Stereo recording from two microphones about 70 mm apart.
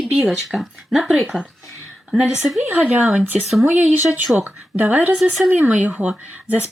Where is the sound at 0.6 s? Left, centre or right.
Centre.